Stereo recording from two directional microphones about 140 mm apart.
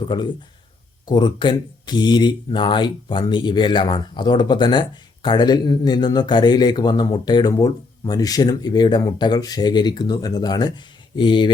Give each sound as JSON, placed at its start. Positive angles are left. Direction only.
{"t": 0.1, "sound": "speech", "side_deg": 35}